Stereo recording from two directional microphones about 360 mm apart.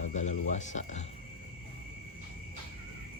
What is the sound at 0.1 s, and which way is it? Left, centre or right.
Speech, centre.